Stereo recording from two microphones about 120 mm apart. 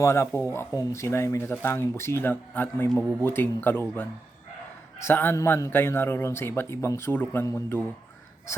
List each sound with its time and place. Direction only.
0.0 s a man's voice: 20° left (ahead or behind)